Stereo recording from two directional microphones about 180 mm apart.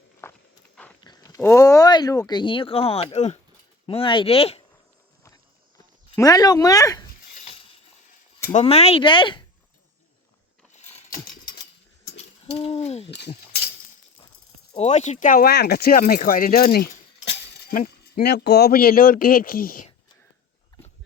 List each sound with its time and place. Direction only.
0.2 s walk: 15° left (ahead or behind)
1.0 s speech: 20° left (ahead or behind)
5.2 s a sound: 20° left (ahead or behind)
7.3 s a sound: 35° left (ahead or behind)
8.6 s speech: 35° left (ahead or behind)
10.7 s a sound: 40° left (ahead or behind)
12.1 s owl: 35° left (ahead or behind)
13.1 s speech: 70° left (ahead or behind)
14.7 s speech: 35° left (ahead or behind); by 19.9 s 50° left (ahead or behind)